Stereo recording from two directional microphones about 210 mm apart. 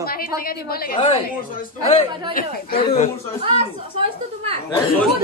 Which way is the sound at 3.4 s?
25° right (ahead or behind).